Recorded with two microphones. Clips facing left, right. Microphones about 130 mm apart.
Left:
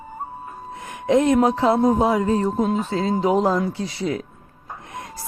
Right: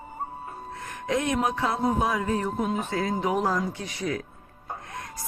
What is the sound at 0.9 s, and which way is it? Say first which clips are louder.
Music: left 9 dB; 20° left (ahead or behind).